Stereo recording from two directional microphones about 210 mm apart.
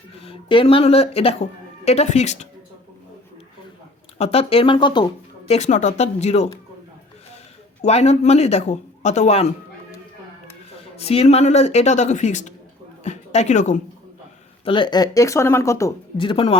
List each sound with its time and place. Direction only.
0.2 s speech: 25° left (ahead or behind)
4.2 s speech: 30° left (ahead or behind)
5.5 s a man's voice: 35° left (ahead or behind)
7.8 s a man's voice: 30° left (ahead or behind)
10.9 s a man's voice: 30° left (ahead or behind)
14.6 s speech: 20° left (ahead or behind)